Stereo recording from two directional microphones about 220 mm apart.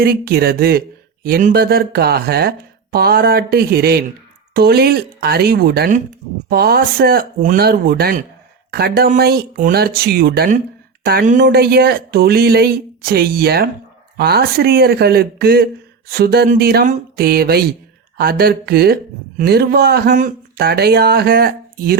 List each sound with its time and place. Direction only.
0.0 s a woman's voice: 45° right (ahead or behind)